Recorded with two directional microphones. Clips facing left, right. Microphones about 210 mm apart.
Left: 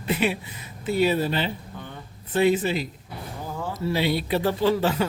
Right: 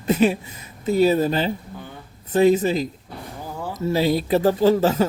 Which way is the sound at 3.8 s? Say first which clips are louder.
Right 5 dB; 40° right (ahead or behind).